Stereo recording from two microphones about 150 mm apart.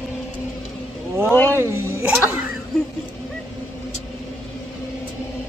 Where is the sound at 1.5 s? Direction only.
15° right (ahead or behind).